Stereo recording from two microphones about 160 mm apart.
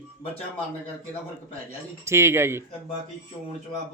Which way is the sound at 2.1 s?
15° right (ahead or behind).